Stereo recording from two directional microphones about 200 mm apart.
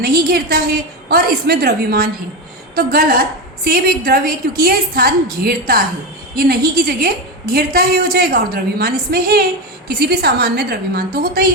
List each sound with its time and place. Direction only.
0.0 s a woman's voice: 50° right (ahead or behind)